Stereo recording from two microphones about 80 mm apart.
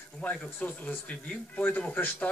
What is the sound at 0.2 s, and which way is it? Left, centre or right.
Speech, left.